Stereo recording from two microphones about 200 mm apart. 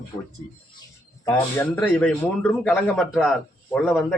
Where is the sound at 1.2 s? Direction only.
10° left (ahead or behind).